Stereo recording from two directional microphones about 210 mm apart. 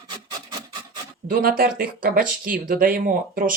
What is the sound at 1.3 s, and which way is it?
Speech, 45° right (ahead or behind).